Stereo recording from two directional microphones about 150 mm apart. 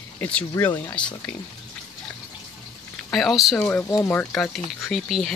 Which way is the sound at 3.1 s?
Centre (ahead or behind).